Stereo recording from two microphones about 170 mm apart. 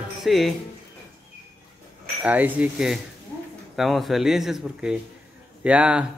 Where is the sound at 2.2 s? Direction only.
10° right (ahead or behind).